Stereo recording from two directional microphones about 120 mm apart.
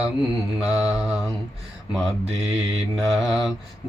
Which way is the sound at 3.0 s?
5° right (ahead or behind).